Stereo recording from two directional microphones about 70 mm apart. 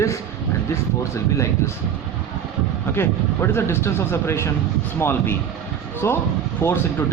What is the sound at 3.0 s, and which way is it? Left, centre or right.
Speech, left.